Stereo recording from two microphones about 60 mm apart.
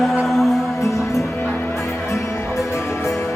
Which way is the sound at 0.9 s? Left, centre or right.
Left.